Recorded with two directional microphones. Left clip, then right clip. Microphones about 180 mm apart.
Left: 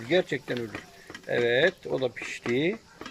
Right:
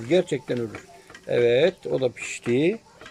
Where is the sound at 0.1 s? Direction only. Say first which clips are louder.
Right 4 dB; 10° right (ahead or behind).